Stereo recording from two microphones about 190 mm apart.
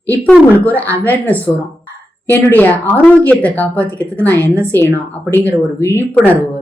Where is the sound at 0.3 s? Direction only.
10° left (ahead or behind).